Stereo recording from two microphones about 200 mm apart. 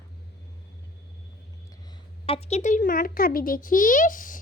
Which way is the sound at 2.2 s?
30° left (ahead or behind).